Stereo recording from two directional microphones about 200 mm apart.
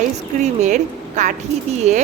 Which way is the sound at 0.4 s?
35° right (ahead or behind).